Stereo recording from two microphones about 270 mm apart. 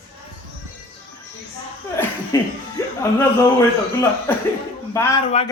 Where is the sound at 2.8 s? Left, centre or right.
Centre.